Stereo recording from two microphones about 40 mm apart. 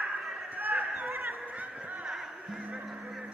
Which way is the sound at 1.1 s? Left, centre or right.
Right.